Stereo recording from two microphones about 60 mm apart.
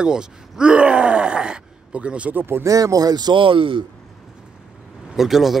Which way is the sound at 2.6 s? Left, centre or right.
Right.